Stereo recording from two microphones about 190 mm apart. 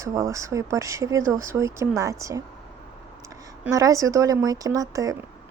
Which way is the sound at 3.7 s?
15° right (ahead or behind).